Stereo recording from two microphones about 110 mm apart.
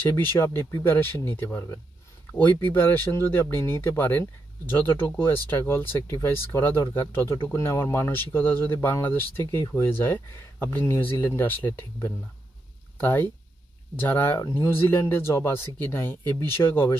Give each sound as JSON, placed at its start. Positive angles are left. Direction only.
{"t": 0.1, "sound": "speech", "side_deg": 20}